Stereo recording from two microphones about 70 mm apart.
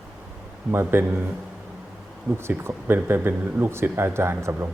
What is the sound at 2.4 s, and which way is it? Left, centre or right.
Speech, right.